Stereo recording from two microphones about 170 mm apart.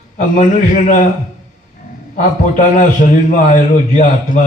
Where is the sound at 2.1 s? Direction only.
50° left (ahead or behind).